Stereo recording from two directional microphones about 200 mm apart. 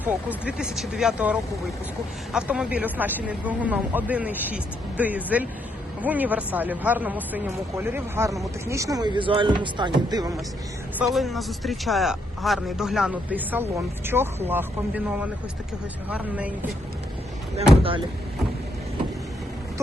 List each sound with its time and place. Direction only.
0.0 s speech: 5° right (ahead or behind)
10.9 s a man's voice: centre (ahead or behind)